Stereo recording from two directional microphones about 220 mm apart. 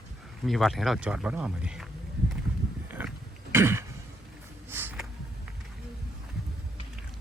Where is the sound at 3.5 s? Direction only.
10° right (ahead or behind).